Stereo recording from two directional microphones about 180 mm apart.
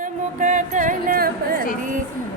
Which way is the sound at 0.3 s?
45° right (ahead or behind).